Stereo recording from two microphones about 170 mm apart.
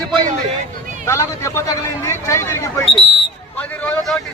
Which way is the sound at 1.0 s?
15° left (ahead or behind).